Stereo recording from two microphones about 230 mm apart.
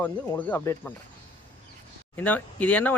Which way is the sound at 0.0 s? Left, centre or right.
Centre.